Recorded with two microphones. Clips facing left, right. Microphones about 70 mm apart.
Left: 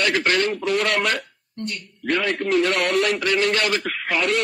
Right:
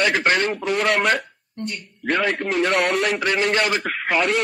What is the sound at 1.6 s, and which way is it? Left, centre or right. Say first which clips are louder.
Speech: right 1 dB; centre.